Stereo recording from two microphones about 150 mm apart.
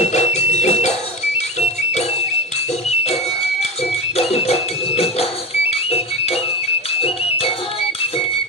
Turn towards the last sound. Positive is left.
turn(degrees=40)  # may be behind; listen again after turning